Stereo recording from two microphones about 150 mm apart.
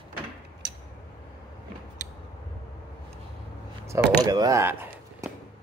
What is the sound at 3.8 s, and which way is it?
Speech, 20° right (ahead or behind).